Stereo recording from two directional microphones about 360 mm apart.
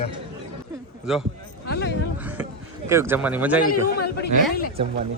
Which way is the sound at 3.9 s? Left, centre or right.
Left.